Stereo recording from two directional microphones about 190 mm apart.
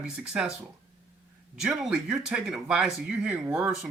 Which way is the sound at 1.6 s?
5° right (ahead or behind).